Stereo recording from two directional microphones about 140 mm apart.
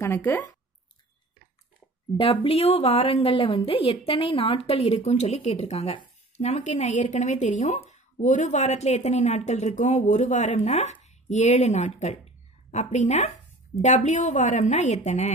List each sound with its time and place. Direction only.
0.0 s speech: 15° left (ahead or behind)
2.4 s a woman's voice: 45° left (ahead or behind)